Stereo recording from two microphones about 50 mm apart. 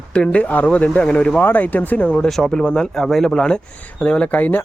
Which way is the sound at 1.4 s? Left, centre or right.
Left.